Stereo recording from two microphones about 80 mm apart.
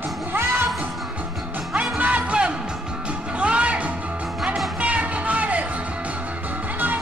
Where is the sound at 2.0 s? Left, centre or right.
Centre.